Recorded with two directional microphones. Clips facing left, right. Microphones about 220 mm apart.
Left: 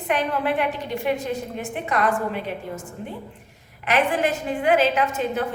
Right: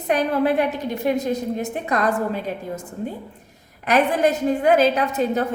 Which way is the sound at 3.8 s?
40° right (ahead or behind).